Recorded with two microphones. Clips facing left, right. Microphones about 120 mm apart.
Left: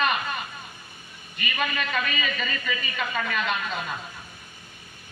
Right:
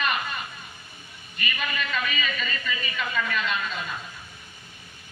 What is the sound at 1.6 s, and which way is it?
A man's voice, 60° left (ahead or behind).